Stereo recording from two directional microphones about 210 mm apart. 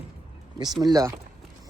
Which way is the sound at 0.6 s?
20° right (ahead or behind).